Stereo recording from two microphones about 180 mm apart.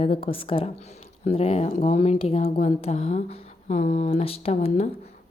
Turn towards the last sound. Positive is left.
turn(degrees=35)  # may be behind; listen again after turning